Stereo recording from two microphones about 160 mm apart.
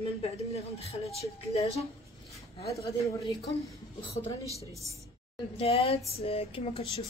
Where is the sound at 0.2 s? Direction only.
40° left (ahead or behind).